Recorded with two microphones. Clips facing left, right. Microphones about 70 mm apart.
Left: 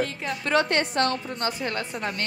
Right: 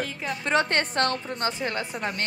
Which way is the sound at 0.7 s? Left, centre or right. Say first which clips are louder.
Left 1 dB; right.